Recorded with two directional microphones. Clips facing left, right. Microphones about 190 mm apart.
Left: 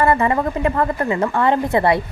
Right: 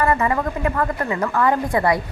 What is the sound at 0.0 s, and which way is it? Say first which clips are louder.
A woman's voice: left 3 dB; 30° left (ahead or behind).